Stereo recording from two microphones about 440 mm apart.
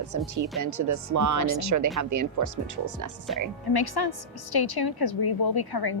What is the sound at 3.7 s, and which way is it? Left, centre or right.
A woman's voice, left.